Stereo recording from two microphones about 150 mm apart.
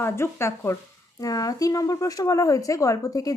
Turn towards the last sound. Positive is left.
turn(degrees=25)  # may be behind; listen again after turning